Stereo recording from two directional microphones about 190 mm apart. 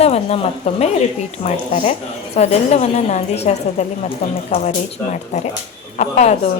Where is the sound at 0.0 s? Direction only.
35° left (ahead or behind).